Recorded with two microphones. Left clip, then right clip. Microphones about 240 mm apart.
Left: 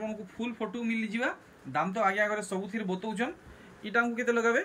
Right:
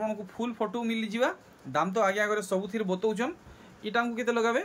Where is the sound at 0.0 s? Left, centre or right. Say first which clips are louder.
Right 4 dB; centre.